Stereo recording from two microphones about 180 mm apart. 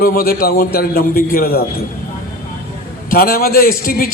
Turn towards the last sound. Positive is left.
turn(degrees=55)  # may be behind; listen again after turning